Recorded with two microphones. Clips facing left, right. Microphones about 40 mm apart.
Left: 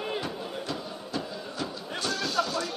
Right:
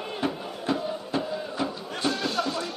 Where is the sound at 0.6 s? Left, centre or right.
Right.